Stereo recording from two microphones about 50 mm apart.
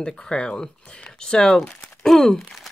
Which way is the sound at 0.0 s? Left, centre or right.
Centre.